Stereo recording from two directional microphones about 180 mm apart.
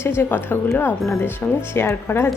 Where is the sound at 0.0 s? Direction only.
15° left (ahead or behind).